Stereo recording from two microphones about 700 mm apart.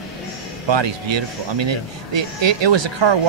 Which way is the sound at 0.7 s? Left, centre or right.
Right.